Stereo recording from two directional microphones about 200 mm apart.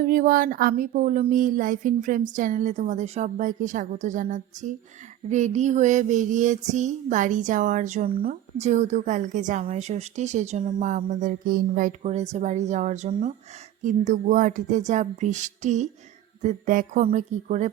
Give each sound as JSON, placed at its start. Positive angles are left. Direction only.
{"t": 0.0, "sound": "a woman's voice", "side_deg": -45}
{"t": 8.5, "sound": "a woman's voice", "side_deg": -35}